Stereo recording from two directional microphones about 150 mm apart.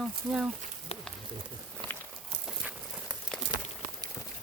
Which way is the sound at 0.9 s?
45° left (ahead or behind).